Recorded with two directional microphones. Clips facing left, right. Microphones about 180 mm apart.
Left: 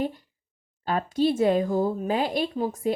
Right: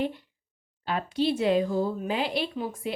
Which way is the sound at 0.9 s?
45° left (ahead or behind).